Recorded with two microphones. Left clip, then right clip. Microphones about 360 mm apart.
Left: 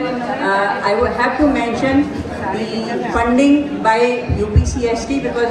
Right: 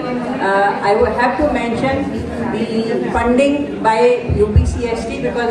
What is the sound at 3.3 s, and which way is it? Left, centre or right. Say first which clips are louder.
Speech: even; right.